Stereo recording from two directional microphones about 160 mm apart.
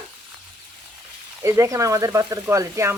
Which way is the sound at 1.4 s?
20° right (ahead or behind).